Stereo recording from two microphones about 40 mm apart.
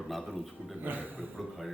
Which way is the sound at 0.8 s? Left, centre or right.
Right.